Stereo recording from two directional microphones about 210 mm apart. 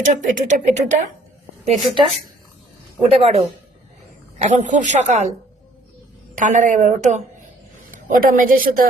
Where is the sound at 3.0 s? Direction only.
30° right (ahead or behind).